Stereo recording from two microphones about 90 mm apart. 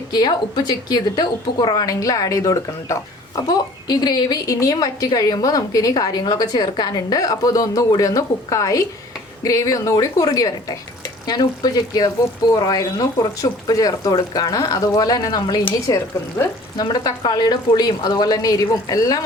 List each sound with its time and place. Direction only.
0.1 s a woman's voice: 50° left (ahead or behind)
15.9 s a woman's voice: 40° left (ahead or behind)
16.7 s a woman's voice: 50° left (ahead or behind)